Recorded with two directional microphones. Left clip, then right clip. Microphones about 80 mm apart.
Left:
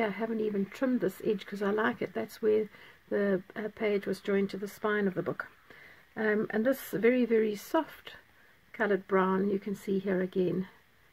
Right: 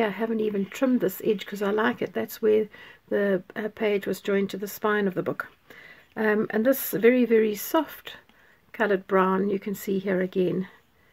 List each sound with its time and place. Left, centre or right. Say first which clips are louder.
0.0 s speech: right 6 dB; right